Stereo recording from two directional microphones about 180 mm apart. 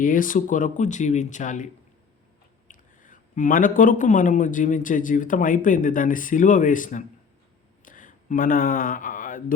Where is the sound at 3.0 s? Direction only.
45° left (ahead or behind).